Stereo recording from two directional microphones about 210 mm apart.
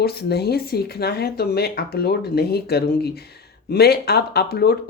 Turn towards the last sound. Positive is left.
turn(degrees=50)  # may be behind; listen again after turning